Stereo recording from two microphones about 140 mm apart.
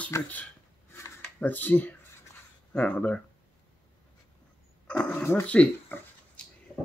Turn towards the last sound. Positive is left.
turn(degrees=5)  # may be behind; listen again after turning